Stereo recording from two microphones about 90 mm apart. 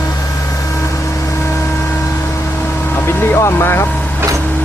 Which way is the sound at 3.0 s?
30° left (ahead or behind).